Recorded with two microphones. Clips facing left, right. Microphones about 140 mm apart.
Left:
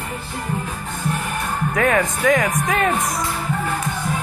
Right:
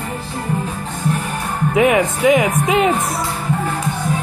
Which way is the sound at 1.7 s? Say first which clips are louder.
Right 5 dB; 15° right (ahead or behind).